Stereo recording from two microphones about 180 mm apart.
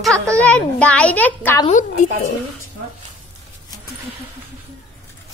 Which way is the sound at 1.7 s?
45° left (ahead or behind).